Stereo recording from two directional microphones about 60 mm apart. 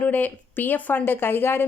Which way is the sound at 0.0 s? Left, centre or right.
Left.